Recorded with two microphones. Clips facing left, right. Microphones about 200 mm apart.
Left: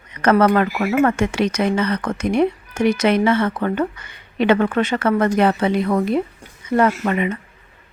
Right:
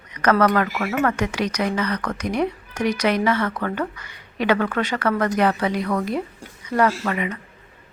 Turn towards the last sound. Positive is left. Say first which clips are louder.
# left 3 dB
turn(degrees=25)  # may be behind; listen again after turning